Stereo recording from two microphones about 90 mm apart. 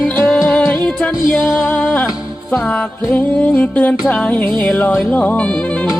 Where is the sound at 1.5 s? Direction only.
15° left (ahead or behind).